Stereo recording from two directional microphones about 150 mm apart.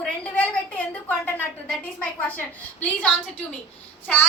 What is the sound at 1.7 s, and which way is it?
Speech, 10° left (ahead or behind).